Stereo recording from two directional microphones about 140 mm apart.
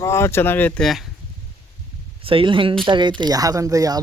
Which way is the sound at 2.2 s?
40° right (ahead or behind).